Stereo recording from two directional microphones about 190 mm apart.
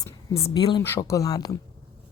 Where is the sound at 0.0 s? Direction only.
15° left (ahead or behind).